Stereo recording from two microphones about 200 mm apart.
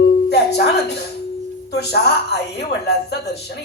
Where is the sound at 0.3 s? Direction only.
55° left (ahead or behind).